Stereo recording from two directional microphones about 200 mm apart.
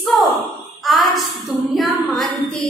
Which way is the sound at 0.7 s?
Centre (ahead or behind).